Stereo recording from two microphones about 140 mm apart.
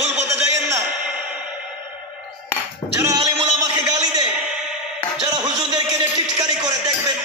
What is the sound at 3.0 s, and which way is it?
Music, 25° right (ahead or behind).